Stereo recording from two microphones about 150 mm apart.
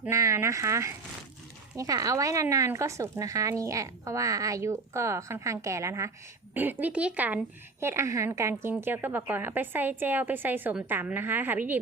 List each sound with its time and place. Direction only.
0.1 s a woman's voice: 20° right (ahead or behind)